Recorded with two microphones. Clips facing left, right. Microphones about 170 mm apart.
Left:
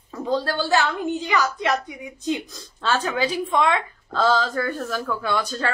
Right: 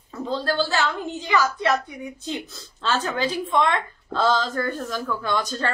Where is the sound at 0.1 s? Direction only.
15° left (ahead or behind).